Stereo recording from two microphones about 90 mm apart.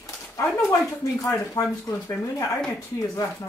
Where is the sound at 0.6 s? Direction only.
35° left (ahead or behind).